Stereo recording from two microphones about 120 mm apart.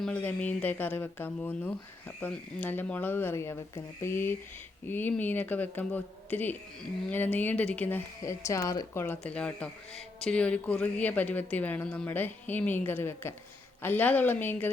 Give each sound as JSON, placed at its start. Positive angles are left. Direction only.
{"t": 0.0, "sound": "speech", "side_deg": 15}
{"t": 9.0, "sound": "speech", "side_deg": 10}